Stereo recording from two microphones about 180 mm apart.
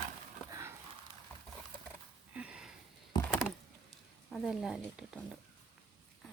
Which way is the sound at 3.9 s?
Centre (ahead or behind).